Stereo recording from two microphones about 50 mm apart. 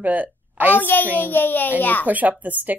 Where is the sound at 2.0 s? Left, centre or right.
Right.